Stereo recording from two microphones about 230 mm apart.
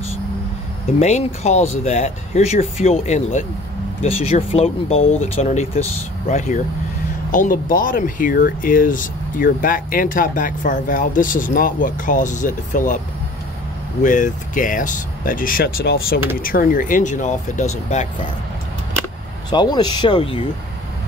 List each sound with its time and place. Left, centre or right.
0.9 s speech: left
5.0 s speech: left
5.3 s speech: left
14.0 s speech: left
19.5 s speech: centre